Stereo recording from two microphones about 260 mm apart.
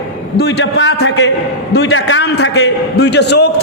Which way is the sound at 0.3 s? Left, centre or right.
Left.